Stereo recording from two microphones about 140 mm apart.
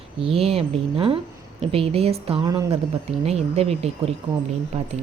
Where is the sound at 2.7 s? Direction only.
45° right (ahead or behind).